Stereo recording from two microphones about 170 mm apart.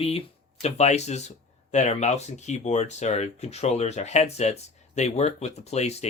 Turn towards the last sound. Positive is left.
turn(degrees=40)  # may be behind; listen again after turning